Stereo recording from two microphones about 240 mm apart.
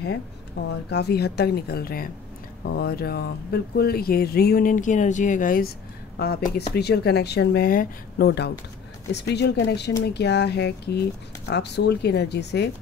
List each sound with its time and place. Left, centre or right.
0.7 s speech: left